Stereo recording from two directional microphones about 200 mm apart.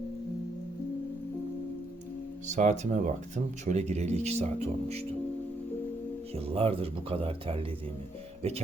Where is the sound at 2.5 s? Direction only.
35° right (ahead or behind).